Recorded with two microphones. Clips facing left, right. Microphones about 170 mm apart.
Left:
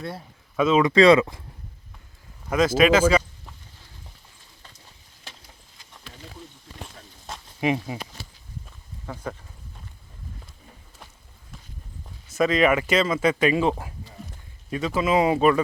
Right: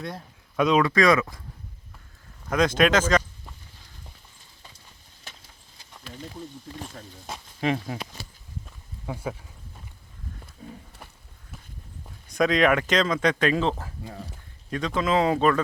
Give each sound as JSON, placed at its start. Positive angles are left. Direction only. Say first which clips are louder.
{"t": 0.0, "sound": "speech", "louder": "left 1 dB", "side_deg": 5}
{"t": 0.8, "sound": "speech", "louder": "left 7 dB", "side_deg": 15}
{"t": 2.5, "sound": "speech", "louder": "left 3 dB", "side_deg": 5}
{"t": 7.6, "sound": "speech", "louder": "left 2 dB", "side_deg": 10}
{"t": 9.0, "sound": "speech", "louder": "right 1 dB", "side_deg": -10}
{"t": 10.6, "sound": "horse", "louder": "right 10 dB", "side_deg": -65}
{"t": 12.3, "sound": "speech", "louder": "left 1 dB", "side_deg": 5}